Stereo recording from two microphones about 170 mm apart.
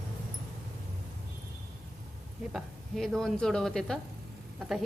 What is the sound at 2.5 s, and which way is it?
Speech, centre (ahead or behind).